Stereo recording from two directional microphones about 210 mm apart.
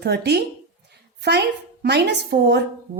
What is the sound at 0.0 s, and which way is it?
A woman's voice, 50° right (ahead or behind).